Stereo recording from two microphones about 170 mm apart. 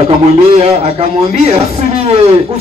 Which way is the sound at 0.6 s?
40° right (ahead or behind).